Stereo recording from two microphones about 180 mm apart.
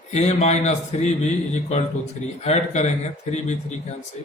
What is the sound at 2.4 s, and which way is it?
A man's voice, 40° left (ahead or behind).